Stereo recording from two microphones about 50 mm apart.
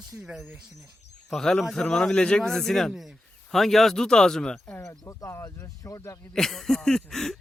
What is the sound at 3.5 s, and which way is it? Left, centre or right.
Speech, centre.